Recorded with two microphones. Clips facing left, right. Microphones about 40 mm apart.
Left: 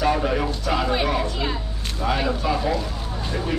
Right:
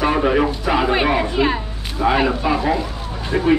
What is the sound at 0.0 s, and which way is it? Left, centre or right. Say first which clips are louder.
Speech: right 5 dB; right.